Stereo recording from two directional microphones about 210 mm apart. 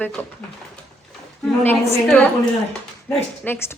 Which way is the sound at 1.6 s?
10° left (ahead or behind).